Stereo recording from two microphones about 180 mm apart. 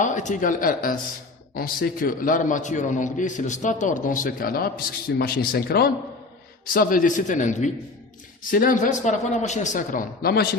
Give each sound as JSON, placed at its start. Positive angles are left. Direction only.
{"t": 0.0, "sound": "a man's voice", "side_deg": 45}
{"t": 6.7, "sound": "a man's voice", "side_deg": 50}